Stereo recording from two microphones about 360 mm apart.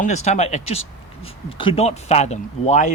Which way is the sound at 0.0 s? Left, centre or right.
Centre.